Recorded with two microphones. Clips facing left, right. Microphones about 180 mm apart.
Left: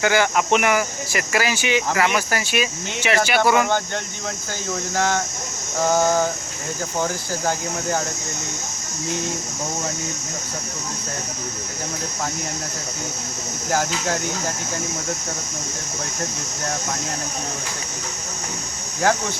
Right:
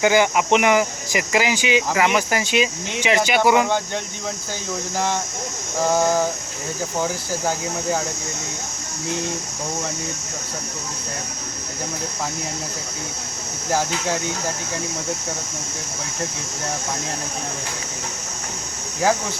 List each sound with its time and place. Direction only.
0.0 s speech: 15° right (ahead or behind)
4.9 s speech: centre (ahead or behind)
13.7 s speech: centre (ahead or behind)